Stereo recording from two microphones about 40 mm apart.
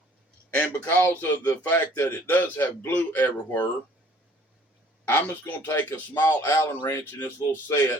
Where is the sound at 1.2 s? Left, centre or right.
Left.